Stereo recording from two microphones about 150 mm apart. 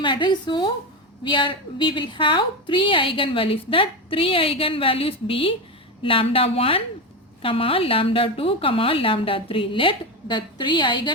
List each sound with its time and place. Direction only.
0.0 s a woman's voice: 30° left (ahead or behind)